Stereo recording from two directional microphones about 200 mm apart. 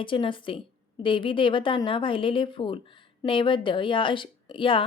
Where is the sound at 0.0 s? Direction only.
25° left (ahead or behind).